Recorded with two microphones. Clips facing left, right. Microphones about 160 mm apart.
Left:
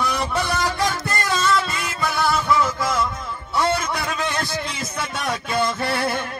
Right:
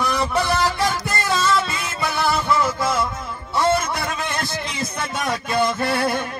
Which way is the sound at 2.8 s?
25° right (ahead or behind).